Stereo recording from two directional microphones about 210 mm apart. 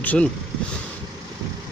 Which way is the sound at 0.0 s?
5° left (ahead or behind).